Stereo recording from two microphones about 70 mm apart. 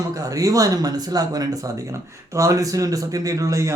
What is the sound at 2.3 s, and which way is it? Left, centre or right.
A man's voice, right.